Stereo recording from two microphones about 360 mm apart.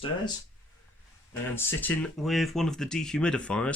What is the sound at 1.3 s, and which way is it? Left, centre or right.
Speech, centre.